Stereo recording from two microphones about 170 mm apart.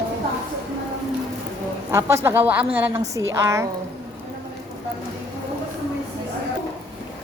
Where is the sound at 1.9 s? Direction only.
15° right (ahead or behind).